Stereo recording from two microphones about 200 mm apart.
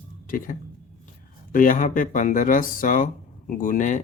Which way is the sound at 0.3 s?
45° left (ahead or behind).